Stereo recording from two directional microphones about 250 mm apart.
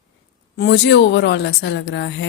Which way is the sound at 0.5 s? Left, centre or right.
Left.